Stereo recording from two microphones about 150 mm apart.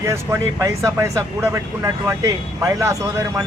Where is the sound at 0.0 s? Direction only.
20° right (ahead or behind).